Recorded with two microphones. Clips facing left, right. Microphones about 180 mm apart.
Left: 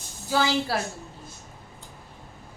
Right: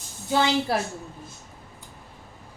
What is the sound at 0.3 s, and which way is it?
Speech, 20° right (ahead or behind).